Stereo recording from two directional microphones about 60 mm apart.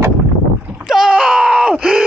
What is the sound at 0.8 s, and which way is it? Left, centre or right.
Groan, centre.